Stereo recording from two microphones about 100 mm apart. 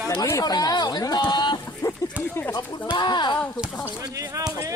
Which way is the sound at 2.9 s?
50° left (ahead or behind).